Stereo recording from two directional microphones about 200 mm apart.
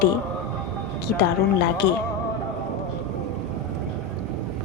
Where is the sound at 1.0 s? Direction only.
55° left (ahead or behind).